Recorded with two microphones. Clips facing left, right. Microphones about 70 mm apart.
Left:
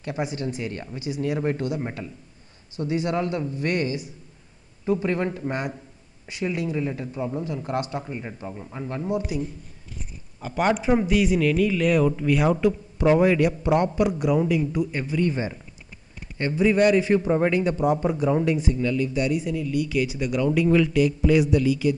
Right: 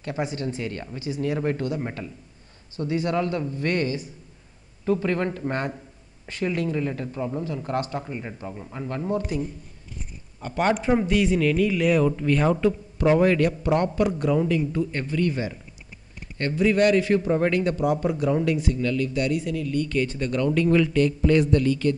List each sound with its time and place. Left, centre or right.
0.0 s a man's voice: centre
2.8 s a man's voice: centre
7.5 s speech: centre
8.0 s a man's voice: centre
10.4 s a man's voice: centre